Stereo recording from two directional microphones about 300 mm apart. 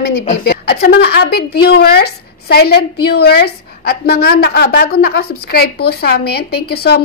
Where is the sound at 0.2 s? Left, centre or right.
Left.